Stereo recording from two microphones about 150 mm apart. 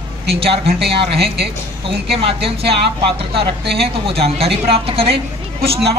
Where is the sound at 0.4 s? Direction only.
40° right (ahead or behind).